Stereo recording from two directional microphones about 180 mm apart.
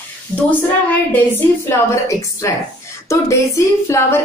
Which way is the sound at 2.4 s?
15° left (ahead or behind).